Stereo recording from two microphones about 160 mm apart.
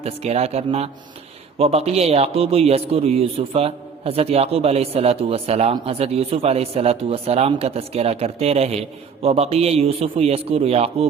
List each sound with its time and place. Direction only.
0.0 s speech: 40° right (ahead or behind)